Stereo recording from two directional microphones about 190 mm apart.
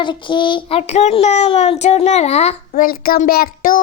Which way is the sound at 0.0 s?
25° left (ahead or behind).